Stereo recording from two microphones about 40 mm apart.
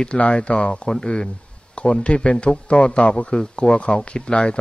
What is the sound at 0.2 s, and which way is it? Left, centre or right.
Speech, left.